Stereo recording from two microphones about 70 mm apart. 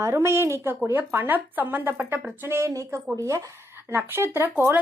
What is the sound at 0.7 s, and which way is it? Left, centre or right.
Speech, right.